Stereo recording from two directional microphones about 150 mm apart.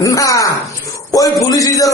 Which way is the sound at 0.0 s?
20° left (ahead or behind).